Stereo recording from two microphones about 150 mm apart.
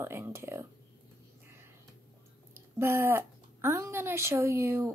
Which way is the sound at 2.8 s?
15° right (ahead or behind).